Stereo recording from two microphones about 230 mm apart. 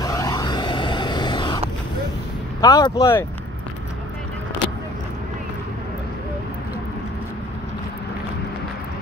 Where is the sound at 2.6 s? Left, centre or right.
Centre.